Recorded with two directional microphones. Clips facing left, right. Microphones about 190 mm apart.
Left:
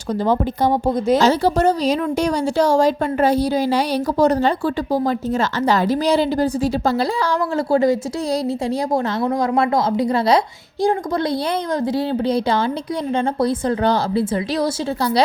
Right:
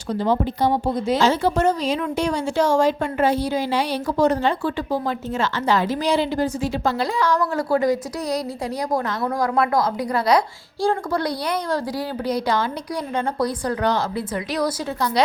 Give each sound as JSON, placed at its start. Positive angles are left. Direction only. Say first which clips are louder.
{"t": 0.1, "sound": "a woman's voice", "louder": "left 2 dB", "side_deg": 45}